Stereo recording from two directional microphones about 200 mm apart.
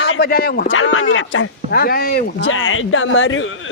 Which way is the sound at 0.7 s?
90° left.